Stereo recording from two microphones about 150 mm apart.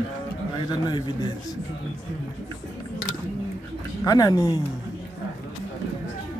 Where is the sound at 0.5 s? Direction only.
30° left (ahead or behind).